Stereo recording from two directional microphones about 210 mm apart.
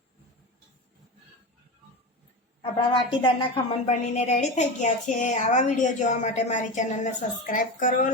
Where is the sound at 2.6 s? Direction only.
25° left (ahead or behind).